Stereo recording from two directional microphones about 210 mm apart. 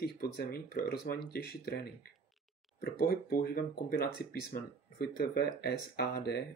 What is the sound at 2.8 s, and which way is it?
Speech, 45° left (ahead or behind).